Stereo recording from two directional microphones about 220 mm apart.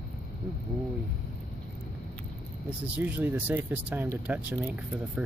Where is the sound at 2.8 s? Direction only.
5° right (ahead or behind).